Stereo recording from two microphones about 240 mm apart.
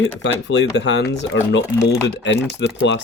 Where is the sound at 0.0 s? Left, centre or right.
Left.